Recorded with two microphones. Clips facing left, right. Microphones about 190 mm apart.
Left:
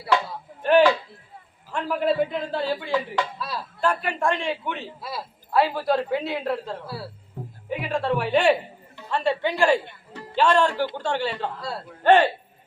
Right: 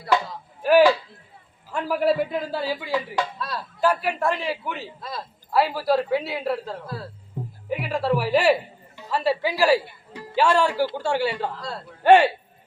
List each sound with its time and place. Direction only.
0.6 s a man's voice: 5° right (ahead or behind)
4.9 s speech: 10° left (ahead or behind)
5.5 s speech: centre (ahead or behind)
6.8 s speech: 10° left (ahead or behind)
7.4 s music: 15° right (ahead or behind)
7.7 s a woman's voice: centre (ahead or behind)